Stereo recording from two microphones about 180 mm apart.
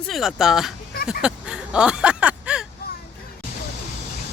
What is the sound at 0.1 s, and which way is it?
Speech, centre (ahead or behind).